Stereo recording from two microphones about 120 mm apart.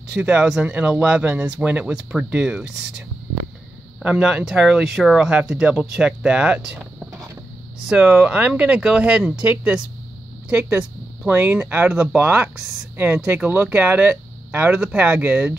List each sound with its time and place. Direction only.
0.1 s speech: 10° right (ahead or behind)
4.0 s speech: 5° right (ahead or behind)